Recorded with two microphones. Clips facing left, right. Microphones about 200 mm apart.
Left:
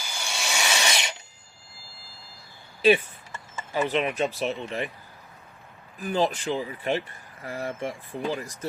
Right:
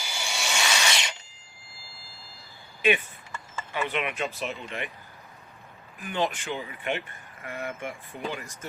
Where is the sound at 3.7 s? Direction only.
35° left (ahead or behind).